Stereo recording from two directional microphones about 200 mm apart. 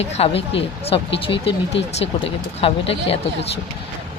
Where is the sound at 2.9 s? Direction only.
30° left (ahead or behind).